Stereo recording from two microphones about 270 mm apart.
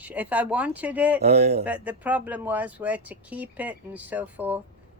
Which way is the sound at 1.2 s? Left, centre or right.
Right.